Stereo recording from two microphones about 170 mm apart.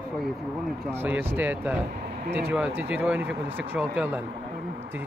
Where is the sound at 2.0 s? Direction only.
70° right (ahead or behind).